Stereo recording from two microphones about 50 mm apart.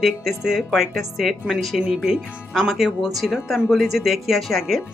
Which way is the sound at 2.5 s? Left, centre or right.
Centre.